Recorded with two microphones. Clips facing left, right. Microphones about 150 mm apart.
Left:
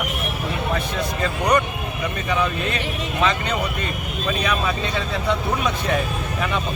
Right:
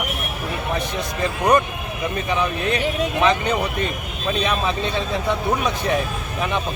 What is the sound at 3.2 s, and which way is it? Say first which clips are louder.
Speech: right 2 dB; 15° right (ahead or behind).